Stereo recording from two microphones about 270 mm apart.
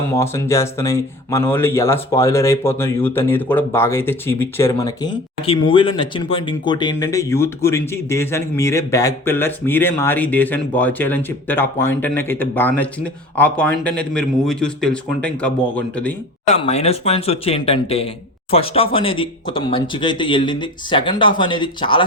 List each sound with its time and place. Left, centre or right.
0.2 s speech: centre
16.5 s speech: left